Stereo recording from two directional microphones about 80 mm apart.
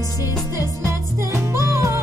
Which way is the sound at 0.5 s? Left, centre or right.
Right.